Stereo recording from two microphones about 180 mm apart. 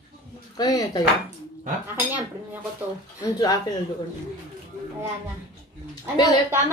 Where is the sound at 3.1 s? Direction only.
20° left (ahead or behind).